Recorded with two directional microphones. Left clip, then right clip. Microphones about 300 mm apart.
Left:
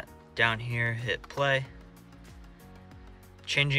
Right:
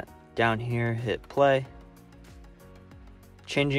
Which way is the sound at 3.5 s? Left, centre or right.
Centre.